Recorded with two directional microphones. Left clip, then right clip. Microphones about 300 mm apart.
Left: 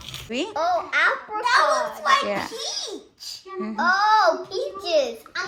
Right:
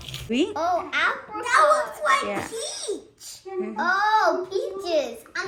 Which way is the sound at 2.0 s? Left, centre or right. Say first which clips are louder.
Left 3 dB; centre.